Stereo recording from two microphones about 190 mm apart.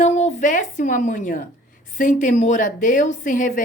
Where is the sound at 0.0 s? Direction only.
40° left (ahead or behind).